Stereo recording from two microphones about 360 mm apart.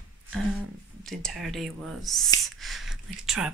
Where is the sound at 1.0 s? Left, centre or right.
Centre.